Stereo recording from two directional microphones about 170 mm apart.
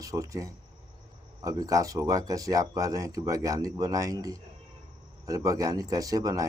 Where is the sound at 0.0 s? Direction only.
20° right (ahead or behind).